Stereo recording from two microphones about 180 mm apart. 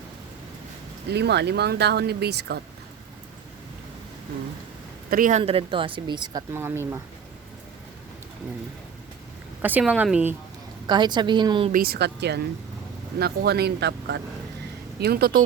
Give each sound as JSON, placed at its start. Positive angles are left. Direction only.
{"t": 1.1, "sound": "speech", "side_deg": -70}
{"t": 5.1, "sound": "speech", "side_deg": -50}
{"t": 5.4, "sound": "speech", "side_deg": -30}
{"t": 9.6, "sound": "speech", "side_deg": -10}
{"t": 10.8, "sound": "speech", "side_deg": -25}
{"t": 11.7, "sound": "speech", "side_deg": -55}